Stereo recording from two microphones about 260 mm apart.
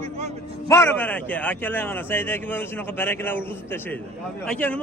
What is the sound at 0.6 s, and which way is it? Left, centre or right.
Speech, centre.